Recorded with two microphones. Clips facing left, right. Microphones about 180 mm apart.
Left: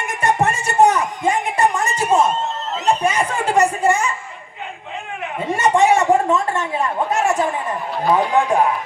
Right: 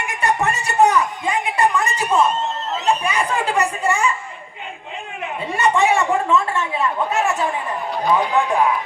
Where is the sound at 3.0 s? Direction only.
40° left (ahead or behind).